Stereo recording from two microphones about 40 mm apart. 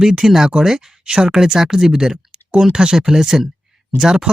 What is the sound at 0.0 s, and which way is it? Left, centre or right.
Speech, centre.